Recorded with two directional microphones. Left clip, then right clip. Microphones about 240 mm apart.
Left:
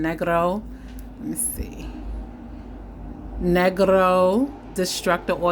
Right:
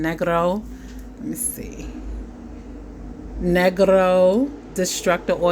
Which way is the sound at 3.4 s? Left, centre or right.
Centre.